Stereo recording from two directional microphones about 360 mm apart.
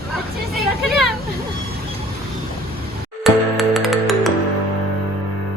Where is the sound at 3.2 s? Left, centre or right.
Centre.